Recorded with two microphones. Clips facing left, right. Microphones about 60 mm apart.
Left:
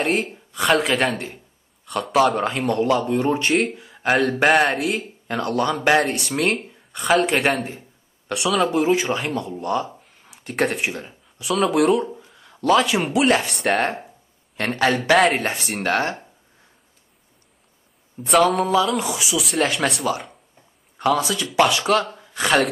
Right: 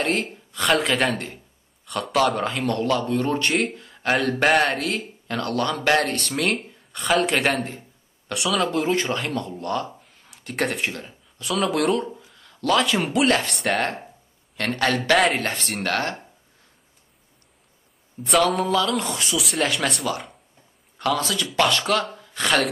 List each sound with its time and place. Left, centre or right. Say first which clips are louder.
0.0 s speech: left 2 dB; centre
2.6 s speech: left 3 dB; centre
3.3 s speech: left 2 dB; centre
6.4 s speech: left 4 dB; centre
9.8 s a sound: left 1 dB; centre
10.9 s speech: left 3 dB; centre
12.4 s a sound: left 4 dB; centre
12.7 s speech: left 2 dB; centre
15.1 s speech: left 3 dB; centre
15.4 s speech: left 2 dB; centre
18.2 s speech: left 3 dB; centre
22.2 s a sound: left 2 dB; centre